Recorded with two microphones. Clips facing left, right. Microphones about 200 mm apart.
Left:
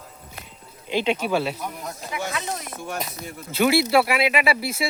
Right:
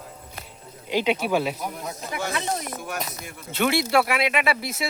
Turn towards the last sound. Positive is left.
turn(degrees=5)  # may be behind; listen again after turning